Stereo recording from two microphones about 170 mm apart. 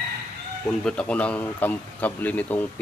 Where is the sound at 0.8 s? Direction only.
5° left (ahead or behind).